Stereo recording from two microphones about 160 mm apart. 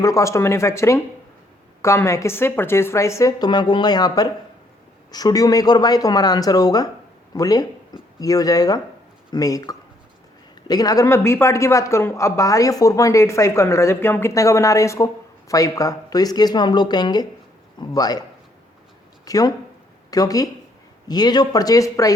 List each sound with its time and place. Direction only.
0.0 s speech: 20° left (ahead or behind)
19.2 s speech: 20° left (ahead or behind)